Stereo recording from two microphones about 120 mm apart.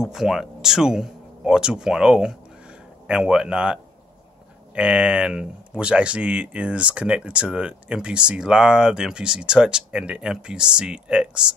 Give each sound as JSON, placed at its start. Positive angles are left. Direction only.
{"t": 0.0, "sound": "speech", "side_deg": -5}